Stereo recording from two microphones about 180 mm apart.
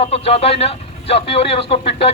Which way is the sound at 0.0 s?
35° left (ahead or behind).